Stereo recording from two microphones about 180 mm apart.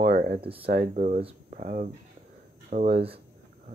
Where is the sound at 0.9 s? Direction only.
40° right (ahead or behind).